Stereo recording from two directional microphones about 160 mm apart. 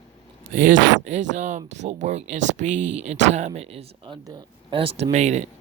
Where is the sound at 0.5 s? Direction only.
55° right (ahead or behind).